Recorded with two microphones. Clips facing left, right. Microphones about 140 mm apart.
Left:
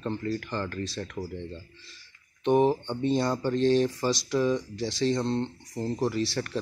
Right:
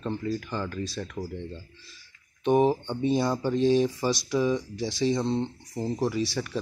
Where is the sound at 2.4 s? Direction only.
10° right (ahead or behind).